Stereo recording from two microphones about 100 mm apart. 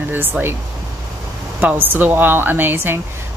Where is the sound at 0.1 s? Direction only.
20° right (ahead or behind).